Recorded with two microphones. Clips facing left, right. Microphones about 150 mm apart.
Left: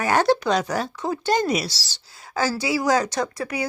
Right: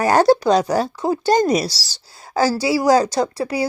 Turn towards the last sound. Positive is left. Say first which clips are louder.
# right 6 dB
turn(degrees=-30)  # may be behind; listen again after turning